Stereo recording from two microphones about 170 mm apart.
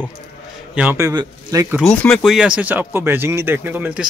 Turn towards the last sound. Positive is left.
turn(degrees=-10)  # may be behind; listen again after turning